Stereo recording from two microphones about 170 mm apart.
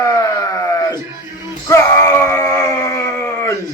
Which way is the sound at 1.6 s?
20° left (ahead or behind).